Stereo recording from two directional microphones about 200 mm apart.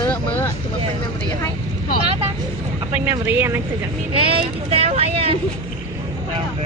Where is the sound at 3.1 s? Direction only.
10° right (ahead or behind).